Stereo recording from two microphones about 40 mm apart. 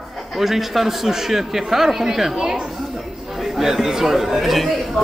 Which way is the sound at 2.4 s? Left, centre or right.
Right.